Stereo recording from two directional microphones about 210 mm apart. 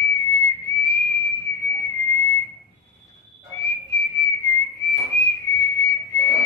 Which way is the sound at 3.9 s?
15° left (ahead or behind).